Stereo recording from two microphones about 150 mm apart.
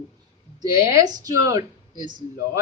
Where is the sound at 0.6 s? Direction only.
20° right (ahead or behind).